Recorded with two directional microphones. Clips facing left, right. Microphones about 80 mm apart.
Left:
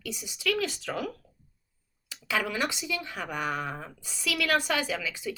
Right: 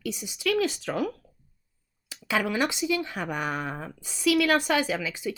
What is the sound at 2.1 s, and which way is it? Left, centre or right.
Speech, right.